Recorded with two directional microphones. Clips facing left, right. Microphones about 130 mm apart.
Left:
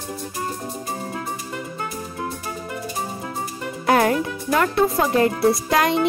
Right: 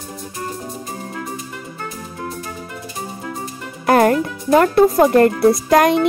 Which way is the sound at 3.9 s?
45° right (ahead or behind).